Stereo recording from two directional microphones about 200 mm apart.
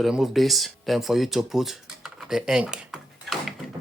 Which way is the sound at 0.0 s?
Centre (ahead or behind).